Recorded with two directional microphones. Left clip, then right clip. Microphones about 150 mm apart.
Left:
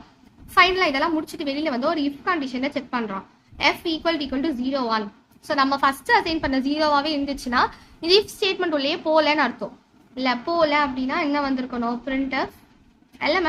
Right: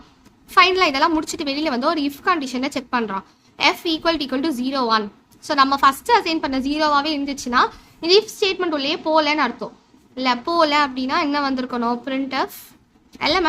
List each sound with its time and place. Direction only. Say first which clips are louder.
0.5 s a woman's voice: right 3 dB; 20° right (ahead or behind)